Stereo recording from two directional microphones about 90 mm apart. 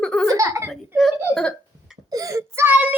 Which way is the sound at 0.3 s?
30° right (ahead or behind).